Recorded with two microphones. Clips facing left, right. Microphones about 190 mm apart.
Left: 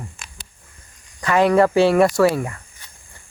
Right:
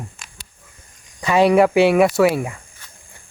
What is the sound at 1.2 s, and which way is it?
Speech, 10° right (ahead or behind).